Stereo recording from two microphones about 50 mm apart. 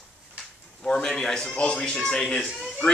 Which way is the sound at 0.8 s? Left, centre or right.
Centre.